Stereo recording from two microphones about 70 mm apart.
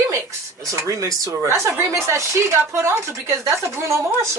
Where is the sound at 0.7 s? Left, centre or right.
Right.